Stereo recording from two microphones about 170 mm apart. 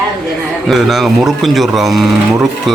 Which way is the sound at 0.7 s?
Centre (ahead or behind).